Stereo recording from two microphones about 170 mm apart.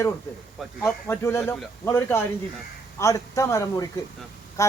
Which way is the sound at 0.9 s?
10° left (ahead or behind).